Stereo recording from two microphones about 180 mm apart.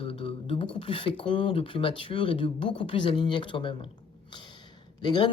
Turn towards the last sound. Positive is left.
turn(degrees=25)  # may be behind; listen again after turning